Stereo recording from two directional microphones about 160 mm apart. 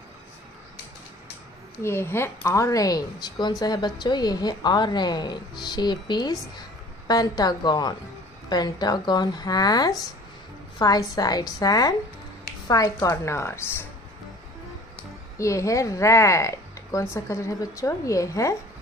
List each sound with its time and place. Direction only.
1.8 s a woman's voice: 15° left (ahead or behind)
15.3 s a woman's voice: 20° left (ahead or behind)